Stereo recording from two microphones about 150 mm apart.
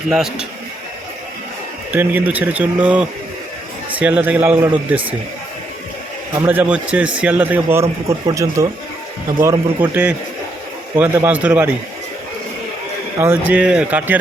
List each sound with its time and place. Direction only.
0.1 s a man's voice: 5° right (ahead or behind)
1.9 s a man's voice: 10° right (ahead or behind)
6.4 s a man's voice: 10° right (ahead or behind)
13.1 s a man's voice: 15° right (ahead or behind)